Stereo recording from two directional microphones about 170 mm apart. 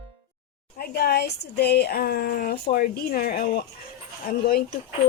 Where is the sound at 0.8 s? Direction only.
70° left (ahead or behind).